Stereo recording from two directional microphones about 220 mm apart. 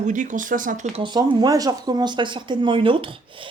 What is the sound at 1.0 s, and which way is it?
Speech, 20° right (ahead or behind).